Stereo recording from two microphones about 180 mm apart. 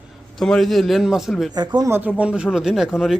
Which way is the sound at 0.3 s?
Centre (ahead or behind).